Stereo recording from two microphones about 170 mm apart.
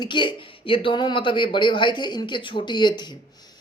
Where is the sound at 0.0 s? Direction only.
30° left (ahead or behind).